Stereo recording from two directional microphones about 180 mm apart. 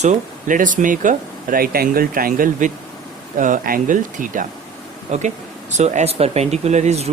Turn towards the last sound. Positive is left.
turn(degrees=-35)  # may be behind; listen again after turning